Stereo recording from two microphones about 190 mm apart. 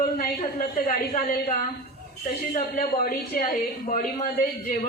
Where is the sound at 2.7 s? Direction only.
50° left (ahead or behind).